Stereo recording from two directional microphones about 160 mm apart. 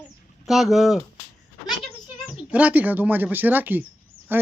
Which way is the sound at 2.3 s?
10° right (ahead or behind).